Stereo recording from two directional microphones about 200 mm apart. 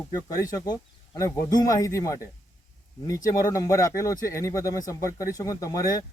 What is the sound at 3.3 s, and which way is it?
Speech, 15° left (ahead or behind).